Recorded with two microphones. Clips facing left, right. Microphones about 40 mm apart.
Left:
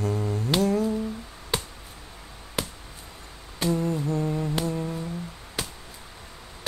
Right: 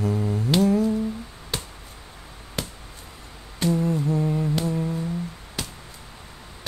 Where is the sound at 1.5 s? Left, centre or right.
Centre.